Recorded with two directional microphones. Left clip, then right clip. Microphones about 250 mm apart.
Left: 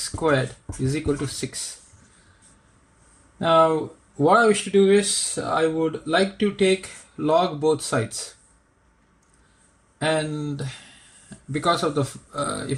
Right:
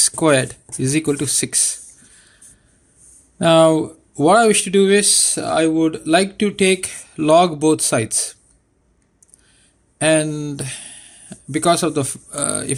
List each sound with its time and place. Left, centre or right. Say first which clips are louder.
0.2 s speech: right 4 dB; right
3.3 s speech: right 5 dB; right
10.0 s speech: right 7 dB; right